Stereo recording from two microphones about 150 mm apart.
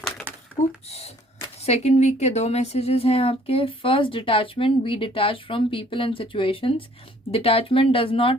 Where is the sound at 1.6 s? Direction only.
45° left (ahead or behind).